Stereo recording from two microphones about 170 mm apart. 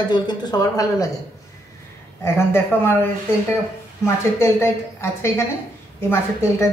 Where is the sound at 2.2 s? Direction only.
15° left (ahead or behind).